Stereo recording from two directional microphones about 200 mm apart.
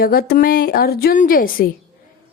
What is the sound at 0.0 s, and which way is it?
A woman's voice, 50° left (ahead or behind).